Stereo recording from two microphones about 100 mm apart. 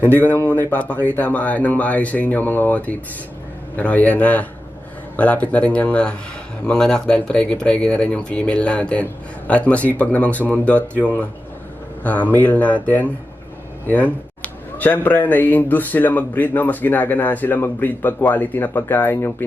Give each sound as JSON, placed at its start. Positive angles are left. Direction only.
{"t": 0.4, "sound": "speech", "side_deg": 15}